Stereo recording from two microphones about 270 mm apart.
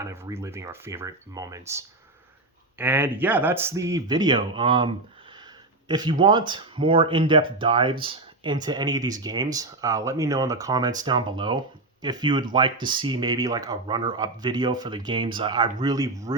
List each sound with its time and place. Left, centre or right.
0.0 s speech: centre
5.9 s speech: centre